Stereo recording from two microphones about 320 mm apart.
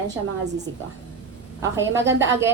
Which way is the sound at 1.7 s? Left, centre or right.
Centre.